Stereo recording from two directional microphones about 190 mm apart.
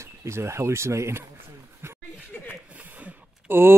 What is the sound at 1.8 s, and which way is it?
Chuckle, 10° right (ahead or behind).